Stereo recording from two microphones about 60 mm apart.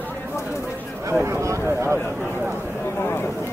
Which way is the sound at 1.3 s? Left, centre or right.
Right.